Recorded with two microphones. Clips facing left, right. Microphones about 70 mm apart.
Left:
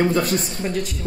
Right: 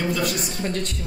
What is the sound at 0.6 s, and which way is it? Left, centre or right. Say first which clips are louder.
Speech: left 2 dB; centre.